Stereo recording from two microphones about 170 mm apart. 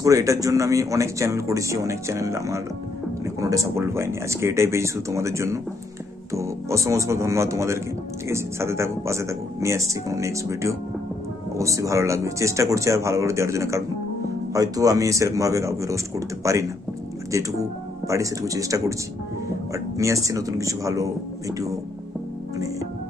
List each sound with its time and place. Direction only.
0.0 s a man's voice: 20° right (ahead or behind)